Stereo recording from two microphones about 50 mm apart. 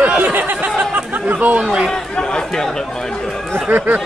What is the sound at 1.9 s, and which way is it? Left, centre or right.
Speech, centre.